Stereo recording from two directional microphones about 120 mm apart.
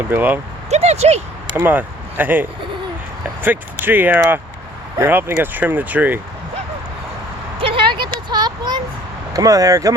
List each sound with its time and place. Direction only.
0.0 s speech: 15° right (ahead or behind)
0.7 s speech: 65° right (ahead or behind)
1.6 s speech: 15° right (ahead or behind)
7.6 s a sound: 45° right (ahead or behind)
8.3 s speech: 35° right (ahead or behind)